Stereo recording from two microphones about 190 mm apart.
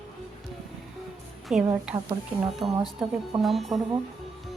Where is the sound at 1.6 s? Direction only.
10° right (ahead or behind).